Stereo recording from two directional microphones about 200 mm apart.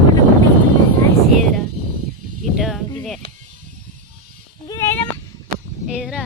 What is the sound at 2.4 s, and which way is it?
Snake, centre (ahead or behind).